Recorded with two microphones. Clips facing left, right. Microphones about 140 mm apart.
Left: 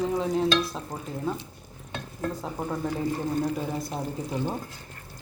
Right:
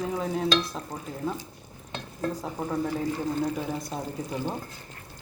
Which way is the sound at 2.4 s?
5° left (ahead or behind).